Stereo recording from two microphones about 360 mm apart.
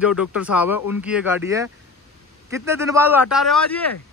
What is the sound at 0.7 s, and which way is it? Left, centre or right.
Speech, left.